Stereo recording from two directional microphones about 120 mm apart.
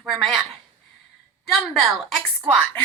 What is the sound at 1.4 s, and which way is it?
A woman's voice, centre (ahead or behind).